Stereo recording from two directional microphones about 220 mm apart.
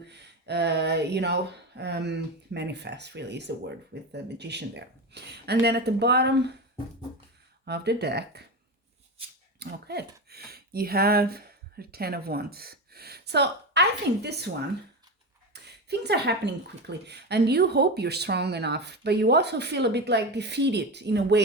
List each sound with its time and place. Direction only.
0.1 s speech: 50° right (ahead or behind)
7.6 s speech: 50° right (ahead or behind)
9.6 s speech: 50° right (ahead or behind)